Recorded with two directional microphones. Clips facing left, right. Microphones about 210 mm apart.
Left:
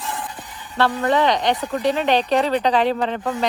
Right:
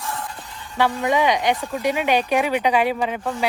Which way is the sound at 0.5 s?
5° left (ahead or behind).